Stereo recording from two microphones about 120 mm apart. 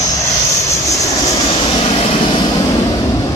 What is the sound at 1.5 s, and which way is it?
Vehicle, 50° left (ahead or behind).